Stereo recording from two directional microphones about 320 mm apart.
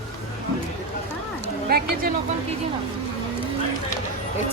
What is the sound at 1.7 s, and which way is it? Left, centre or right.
Speech, right.